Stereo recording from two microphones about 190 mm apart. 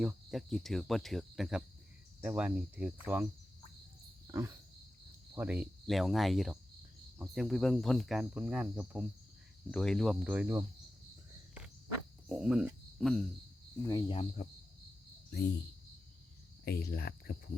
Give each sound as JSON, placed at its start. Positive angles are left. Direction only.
{"t": 0.0, "sound": "speech", "side_deg": 0}
{"t": 4.3, "sound": "wild animals", "side_deg": -15}
{"t": 5.3, "sound": "speech", "side_deg": -10}
{"t": 12.3, "sound": "speech", "side_deg": -5}
{"t": 13.8, "sound": "speech", "side_deg": 20}
{"t": 16.6, "sound": "speech", "side_deg": 55}